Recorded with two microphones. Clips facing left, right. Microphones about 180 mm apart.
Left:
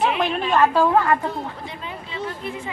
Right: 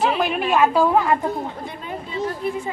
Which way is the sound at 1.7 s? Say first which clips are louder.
Right 3 dB; 50° right (ahead or behind).